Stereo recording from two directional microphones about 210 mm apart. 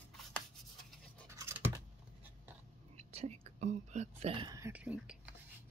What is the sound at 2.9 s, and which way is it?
Whispering, 30° right (ahead or behind).